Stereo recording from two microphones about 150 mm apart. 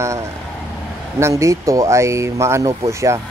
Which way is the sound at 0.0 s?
20° right (ahead or behind).